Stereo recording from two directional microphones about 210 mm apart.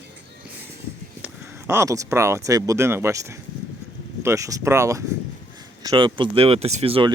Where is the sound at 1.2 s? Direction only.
10° right (ahead or behind).